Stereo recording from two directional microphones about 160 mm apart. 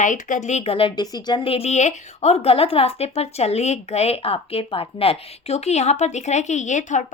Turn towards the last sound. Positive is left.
turn(degrees=50)  # may be behind; listen again after turning